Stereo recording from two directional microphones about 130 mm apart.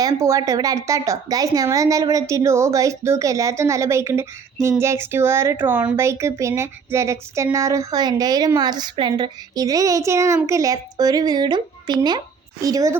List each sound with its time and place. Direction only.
0.0 s speech: 25° right (ahead or behind)